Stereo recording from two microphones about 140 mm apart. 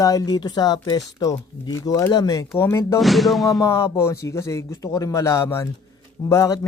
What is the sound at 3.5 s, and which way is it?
Speech, 20° left (ahead or behind).